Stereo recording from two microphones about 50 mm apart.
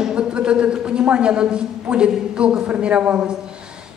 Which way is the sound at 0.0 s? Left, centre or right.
Centre.